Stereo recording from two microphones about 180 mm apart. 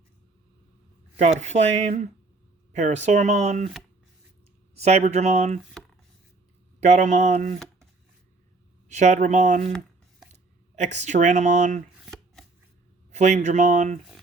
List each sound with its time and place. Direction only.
1.2 s speech: 40° right (ahead or behind)
4.8 s speech: 40° right (ahead or behind)
6.7 s speech: 40° right (ahead or behind)
8.9 s speech: 40° right (ahead or behind)
10.8 s speech: 40° right (ahead or behind)
11.9 s shuffling cards: centre (ahead or behind)
13.1 s speech: 40° right (ahead or behind)